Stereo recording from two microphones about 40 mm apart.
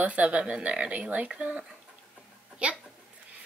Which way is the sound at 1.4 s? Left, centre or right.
Right.